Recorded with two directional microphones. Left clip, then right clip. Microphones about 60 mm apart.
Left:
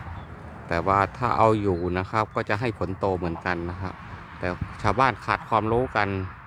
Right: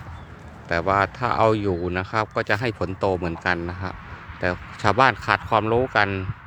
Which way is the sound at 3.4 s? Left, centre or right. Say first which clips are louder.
Right 4 dB; right.